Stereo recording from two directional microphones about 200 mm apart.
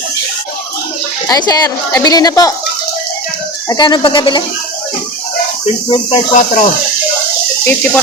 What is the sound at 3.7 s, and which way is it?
Speech, 20° left (ahead or behind).